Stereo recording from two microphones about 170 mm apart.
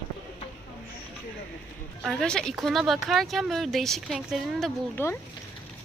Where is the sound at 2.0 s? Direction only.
Centre (ahead or behind).